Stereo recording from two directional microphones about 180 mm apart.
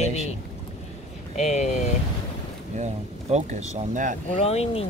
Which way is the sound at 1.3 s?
40° left (ahead or behind).